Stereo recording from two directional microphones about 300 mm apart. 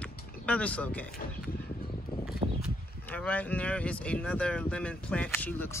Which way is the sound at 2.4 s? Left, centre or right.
Centre.